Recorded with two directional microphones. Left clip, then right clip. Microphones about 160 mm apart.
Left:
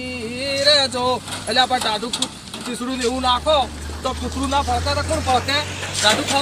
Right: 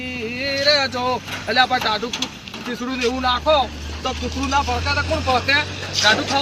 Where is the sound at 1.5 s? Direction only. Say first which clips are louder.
Right 1 dB; 20° left (ahead or behind).